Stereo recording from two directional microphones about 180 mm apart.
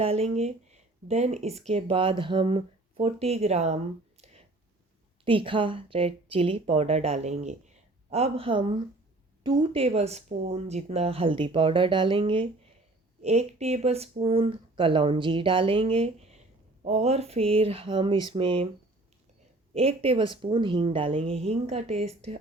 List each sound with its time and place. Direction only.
0.0 s speech: 35° right (ahead or behind)
4.2 s a sound: 35° right (ahead or behind)
5.2 s speech: 30° right (ahead or behind)
19.7 s speech: 35° right (ahead or behind)